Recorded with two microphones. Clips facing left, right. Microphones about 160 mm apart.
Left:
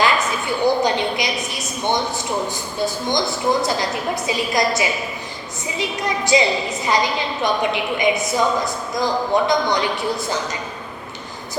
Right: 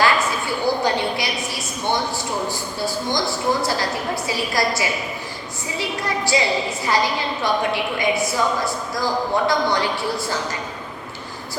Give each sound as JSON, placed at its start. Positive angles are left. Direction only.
{"t": 0.0, "sound": "a woman's voice", "side_deg": 20}